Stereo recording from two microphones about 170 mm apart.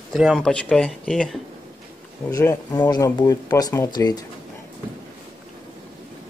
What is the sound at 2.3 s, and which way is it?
Speech, 20° left (ahead or behind).